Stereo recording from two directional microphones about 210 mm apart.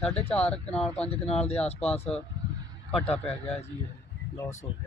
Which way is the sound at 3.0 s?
30° left (ahead or behind).